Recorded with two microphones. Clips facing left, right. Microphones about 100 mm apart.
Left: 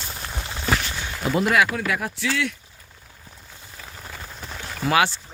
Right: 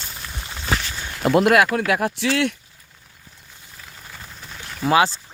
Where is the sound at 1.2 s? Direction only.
65° right (ahead or behind).